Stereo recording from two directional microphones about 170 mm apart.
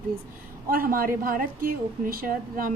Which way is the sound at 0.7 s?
60° right (ahead or behind).